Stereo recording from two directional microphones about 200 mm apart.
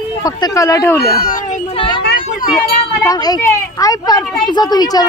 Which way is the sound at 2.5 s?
20° left (ahead or behind).